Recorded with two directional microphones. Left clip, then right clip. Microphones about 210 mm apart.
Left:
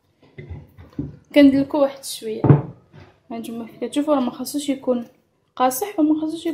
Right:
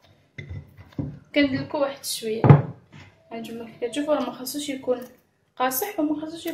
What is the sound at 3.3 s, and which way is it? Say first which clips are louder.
A woman's voice: left 3 dB; 45° left (ahead or behind).